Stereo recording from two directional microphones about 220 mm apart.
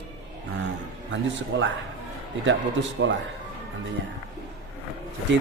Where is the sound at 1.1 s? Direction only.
55° right (ahead or behind).